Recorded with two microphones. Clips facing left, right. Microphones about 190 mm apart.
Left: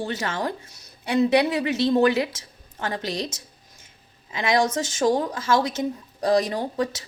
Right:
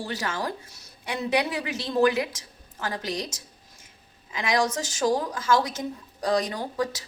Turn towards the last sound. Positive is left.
turn(degrees=25)  # may be behind; listen again after turning